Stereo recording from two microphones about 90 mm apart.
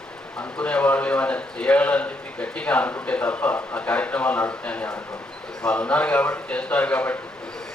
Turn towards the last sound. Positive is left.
turn(degrees=15)  # may be behind; listen again after turning